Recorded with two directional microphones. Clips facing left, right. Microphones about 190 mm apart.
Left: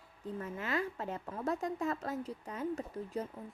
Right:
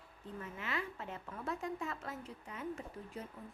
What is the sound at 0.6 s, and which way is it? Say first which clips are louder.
Speech: left 6 dB; 40° left (ahead or behind).